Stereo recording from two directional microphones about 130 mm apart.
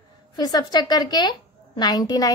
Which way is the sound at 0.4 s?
30° left (ahead or behind).